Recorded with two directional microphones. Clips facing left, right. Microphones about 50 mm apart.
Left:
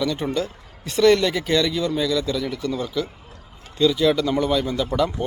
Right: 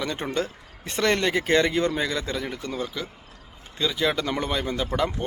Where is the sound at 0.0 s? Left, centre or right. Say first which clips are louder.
Left 4 dB; right.